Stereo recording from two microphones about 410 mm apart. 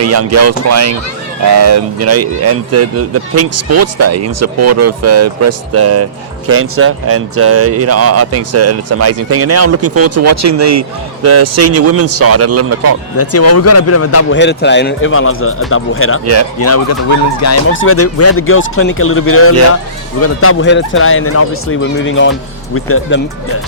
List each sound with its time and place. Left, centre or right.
0.0 s speech: right
13.1 s speech: left
16.2 s speech: right
16.6 s speech: left